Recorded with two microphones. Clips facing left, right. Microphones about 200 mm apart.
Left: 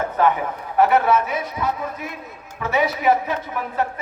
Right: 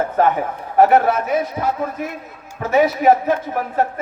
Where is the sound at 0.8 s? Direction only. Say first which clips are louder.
Right 3 dB; 50° right (ahead or behind).